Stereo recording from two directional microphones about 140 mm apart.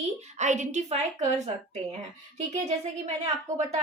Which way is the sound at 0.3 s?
60° right (ahead or behind).